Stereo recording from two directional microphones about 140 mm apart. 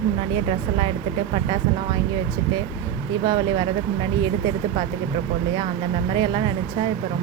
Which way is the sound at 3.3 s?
30° right (ahead or behind).